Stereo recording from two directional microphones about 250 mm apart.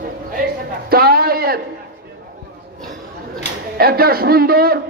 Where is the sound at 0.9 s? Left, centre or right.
Right.